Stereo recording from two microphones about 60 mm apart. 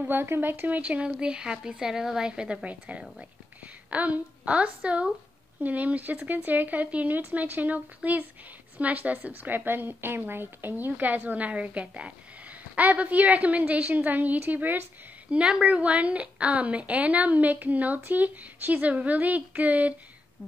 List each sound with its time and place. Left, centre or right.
0.0 s a woman's voice: right
15.3 s a woman's voice: centre